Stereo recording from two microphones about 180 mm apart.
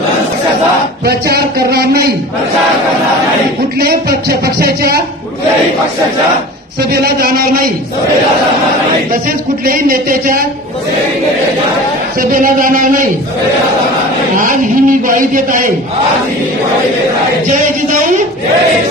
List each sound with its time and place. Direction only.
1.0 s speech: 60° right (ahead or behind)
3.8 s speech: 55° right (ahead or behind)
6.9 s speech: 60° right (ahead or behind)
9.7 s speech: 50° right (ahead or behind)
12.2 s speech: 50° right (ahead or behind)
14.4 s a sound: 50° right (ahead or behind)